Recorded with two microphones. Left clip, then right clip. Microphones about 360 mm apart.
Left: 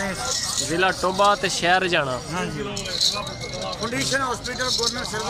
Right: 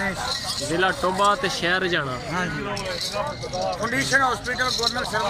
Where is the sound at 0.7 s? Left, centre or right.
Centre.